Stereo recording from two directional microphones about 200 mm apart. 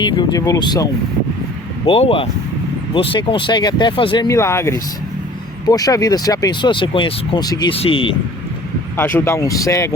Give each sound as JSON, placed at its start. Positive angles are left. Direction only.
{"t": 0.0, "sound": "speech", "side_deg": 20}
{"t": 1.9, "sound": "speech", "side_deg": 30}
{"t": 9.0, "sound": "speech", "side_deg": 10}